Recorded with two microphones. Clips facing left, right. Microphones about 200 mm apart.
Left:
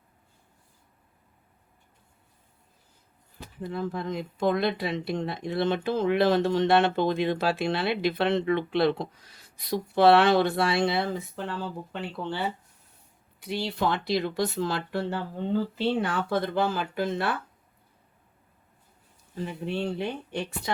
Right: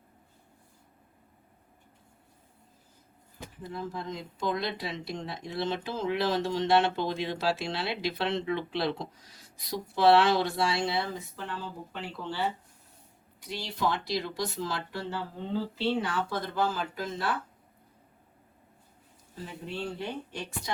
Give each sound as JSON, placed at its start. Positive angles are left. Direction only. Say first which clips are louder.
{"t": 3.6, "sound": "speech", "louder": "left 6 dB", "side_deg": 60}
{"t": 13.4, "sound": "speech", "louder": "left 4 dB", "side_deg": 60}
{"t": 19.6, "sound": "speech", "louder": "left 5 dB", "side_deg": 65}